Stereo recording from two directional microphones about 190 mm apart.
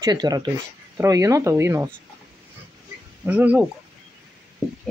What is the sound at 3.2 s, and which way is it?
Speech, 10° right (ahead or behind).